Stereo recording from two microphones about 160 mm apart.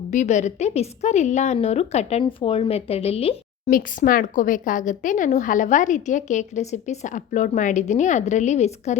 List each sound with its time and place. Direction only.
0.1 s a woman's voice: 50° left (ahead or behind)
3.7 s speech: 60° left (ahead or behind); by 9.0 s 45° left (ahead or behind)